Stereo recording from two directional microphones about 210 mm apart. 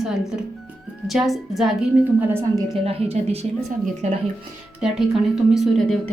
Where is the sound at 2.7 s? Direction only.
30° right (ahead or behind).